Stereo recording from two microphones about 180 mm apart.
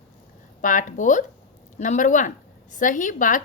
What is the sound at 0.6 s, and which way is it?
Speech, 45° left (ahead or behind).